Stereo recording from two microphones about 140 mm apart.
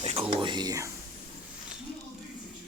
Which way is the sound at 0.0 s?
45° right (ahead or behind).